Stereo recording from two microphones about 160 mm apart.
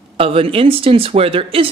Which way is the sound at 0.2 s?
35° right (ahead or behind).